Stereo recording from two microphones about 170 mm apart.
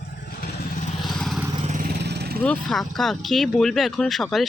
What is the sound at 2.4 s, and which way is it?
Speech, 5° left (ahead or behind).